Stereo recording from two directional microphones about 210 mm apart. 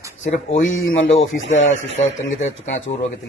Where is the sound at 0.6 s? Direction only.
70° left (ahead or behind).